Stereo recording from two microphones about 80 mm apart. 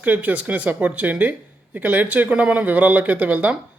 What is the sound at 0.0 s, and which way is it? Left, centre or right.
Speech, centre.